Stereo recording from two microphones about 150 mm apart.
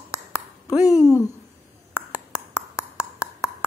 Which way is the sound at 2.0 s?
10° right (ahead or behind).